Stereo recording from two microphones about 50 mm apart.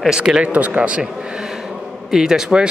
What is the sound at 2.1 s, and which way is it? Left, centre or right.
Speech, centre.